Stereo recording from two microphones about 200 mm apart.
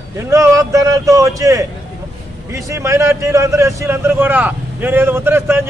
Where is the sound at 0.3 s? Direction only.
15° right (ahead or behind).